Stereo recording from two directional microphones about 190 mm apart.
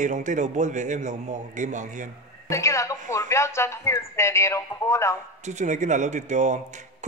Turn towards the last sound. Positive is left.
turn(degrees=-40)  # may be behind; listen again after turning